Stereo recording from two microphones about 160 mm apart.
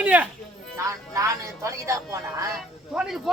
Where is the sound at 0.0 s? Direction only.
10° right (ahead or behind).